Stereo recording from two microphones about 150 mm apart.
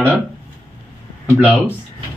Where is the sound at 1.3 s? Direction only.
10° right (ahead or behind).